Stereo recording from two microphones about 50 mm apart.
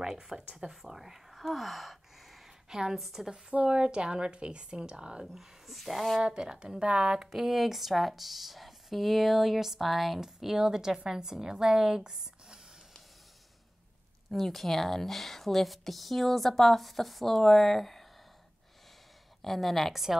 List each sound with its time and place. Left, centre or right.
0.0 s a woman's voice: centre
5.2 s speech: centre
6.2 s a woman's voice: centre
14.3 s speech: centre
19.4 s speech: centre